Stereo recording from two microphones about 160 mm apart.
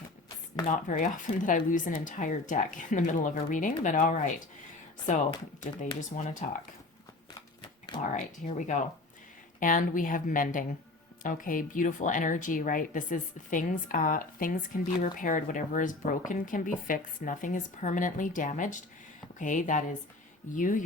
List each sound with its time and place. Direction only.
0.9 s speech: 55° left (ahead or behind)
6.0 s speech: 50° left (ahead or behind)
8.1 s a woman's voice: 50° left (ahead or behind)